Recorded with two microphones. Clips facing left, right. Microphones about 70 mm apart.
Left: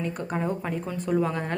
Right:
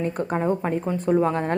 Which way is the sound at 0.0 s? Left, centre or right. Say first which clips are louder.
Right 5 dB; right.